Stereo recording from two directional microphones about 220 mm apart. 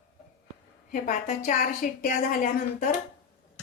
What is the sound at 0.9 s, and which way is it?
A woman's voice, 35° left (ahead or behind).